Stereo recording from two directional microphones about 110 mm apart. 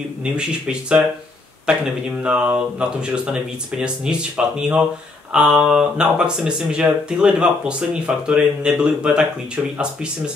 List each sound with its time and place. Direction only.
0.2 s speech: 10° right (ahead or behind)